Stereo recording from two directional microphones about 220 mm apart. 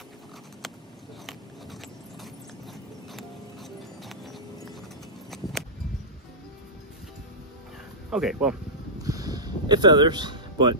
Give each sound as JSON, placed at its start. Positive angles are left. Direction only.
{"t": 4.0, "sound": "clip-clop", "side_deg": 0}
{"t": 5.3, "sound": "a sound", "side_deg": 0}
{"t": 8.1, "sound": "speech", "side_deg": 0}
{"t": 9.0, "sound": "music", "side_deg": -15}